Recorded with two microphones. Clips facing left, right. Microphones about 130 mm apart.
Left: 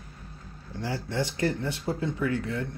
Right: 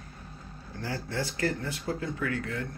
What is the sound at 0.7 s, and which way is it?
Speech, 20° left (ahead or behind).